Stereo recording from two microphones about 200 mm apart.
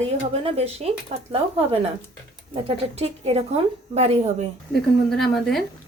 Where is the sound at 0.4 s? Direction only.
30° right (ahead or behind).